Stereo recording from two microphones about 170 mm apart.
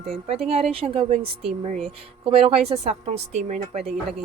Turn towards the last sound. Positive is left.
turn(degrees=-40)  # may be behind; listen again after turning